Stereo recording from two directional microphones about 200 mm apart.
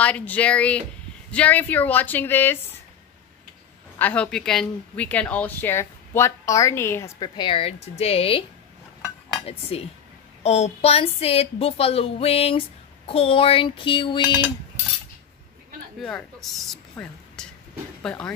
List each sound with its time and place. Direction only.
0.0 s speech: 5° left (ahead or behind)
4.0 s a woman's voice: 5° left (ahead or behind); by 8.5 s 30° left (ahead or behind)
9.5 s a woman's voice: 30° left (ahead or behind)
16.0 s speech: centre (ahead or behind)
16.9 s a sound: 5° left (ahead or behind)
18.0 s speech: 5° left (ahead or behind)